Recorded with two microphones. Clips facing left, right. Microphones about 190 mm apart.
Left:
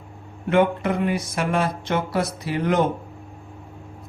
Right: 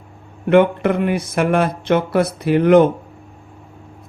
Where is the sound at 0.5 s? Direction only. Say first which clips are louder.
Right 6 dB; 60° right (ahead or behind).